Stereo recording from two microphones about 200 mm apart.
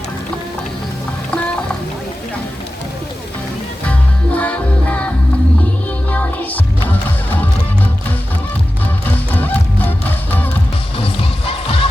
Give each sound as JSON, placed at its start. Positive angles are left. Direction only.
{"t": 4.4, "sound": "music", "side_deg": 5}
{"t": 6.1, "sound": "music", "side_deg": 10}
{"t": 9.0, "sound": "music", "side_deg": 10}
{"t": 10.9, "sound": "music", "side_deg": 30}